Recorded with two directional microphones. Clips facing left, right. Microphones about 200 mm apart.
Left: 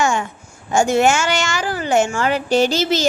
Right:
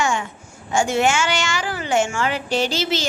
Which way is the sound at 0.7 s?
40° left (ahead or behind).